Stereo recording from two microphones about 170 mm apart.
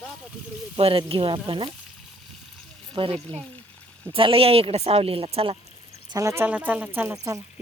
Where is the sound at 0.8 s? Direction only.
35° right (ahead or behind).